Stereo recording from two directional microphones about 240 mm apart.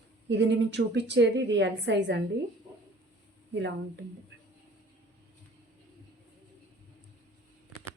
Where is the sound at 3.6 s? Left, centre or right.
Right.